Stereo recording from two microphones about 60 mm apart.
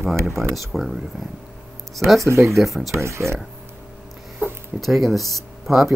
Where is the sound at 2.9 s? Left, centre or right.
Right.